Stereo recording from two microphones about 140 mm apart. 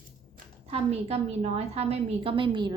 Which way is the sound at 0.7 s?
50° right (ahead or behind).